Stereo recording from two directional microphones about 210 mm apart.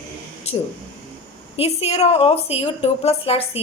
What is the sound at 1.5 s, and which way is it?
A woman's voice, 30° left (ahead or behind).